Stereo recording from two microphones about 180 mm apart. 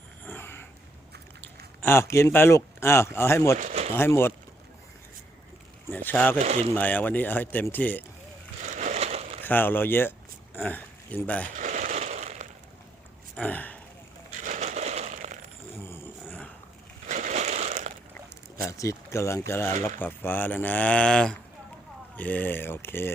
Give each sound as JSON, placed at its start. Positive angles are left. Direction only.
{"t": 0.3, "sound": "a sound", "side_deg": 10}
{"t": 1.8, "sound": "speech", "side_deg": 15}
{"t": 3.6, "sound": "speech", "side_deg": -45}
{"t": 3.9, "sound": "speech", "side_deg": 15}
{"t": 5.9, "sound": "speech", "side_deg": 10}
{"t": 8.6, "sound": "a sound", "side_deg": -45}
{"t": 9.4, "sound": "speech", "side_deg": 10}
{"t": 11.5, "sound": "a sound", "side_deg": -45}
{"t": 13.3, "sound": "speech", "side_deg": 10}
{"t": 14.4, "sound": "a sound", "side_deg": -40}
{"t": 15.8, "sound": "roaring cats", "side_deg": 15}
{"t": 17.1, "sound": "crushing", "side_deg": -45}
{"t": 18.6, "sound": "speech", "side_deg": 15}